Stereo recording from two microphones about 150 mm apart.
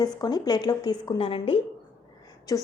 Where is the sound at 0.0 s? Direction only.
25° left (ahead or behind).